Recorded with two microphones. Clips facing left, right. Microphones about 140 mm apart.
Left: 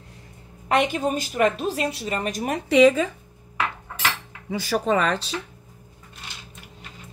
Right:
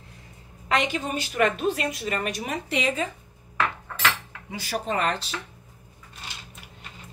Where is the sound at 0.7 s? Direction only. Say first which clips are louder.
Left 4 dB; 50° left (ahead or behind); by 2.4 s 35° left (ahead or behind).